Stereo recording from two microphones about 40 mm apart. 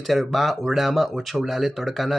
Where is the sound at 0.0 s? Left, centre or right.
Centre.